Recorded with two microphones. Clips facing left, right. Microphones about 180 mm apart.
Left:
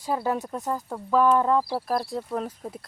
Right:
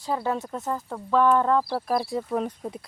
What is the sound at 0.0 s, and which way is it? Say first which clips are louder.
Speech: left 1 dB; 10° left (ahead or behind).